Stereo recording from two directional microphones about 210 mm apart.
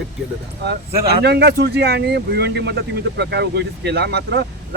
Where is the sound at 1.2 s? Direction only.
50° right (ahead or behind).